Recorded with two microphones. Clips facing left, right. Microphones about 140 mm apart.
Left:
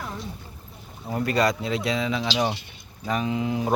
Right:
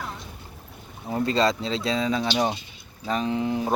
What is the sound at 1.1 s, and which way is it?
Speech, 25° right (ahead or behind).